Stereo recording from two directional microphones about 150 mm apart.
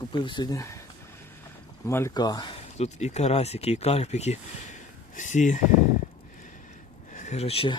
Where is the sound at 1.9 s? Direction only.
15° left (ahead or behind).